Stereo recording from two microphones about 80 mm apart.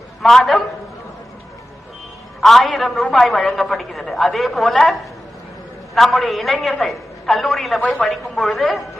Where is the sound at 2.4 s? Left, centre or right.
Centre.